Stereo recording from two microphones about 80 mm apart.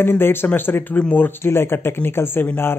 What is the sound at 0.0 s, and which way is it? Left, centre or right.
Speech, left.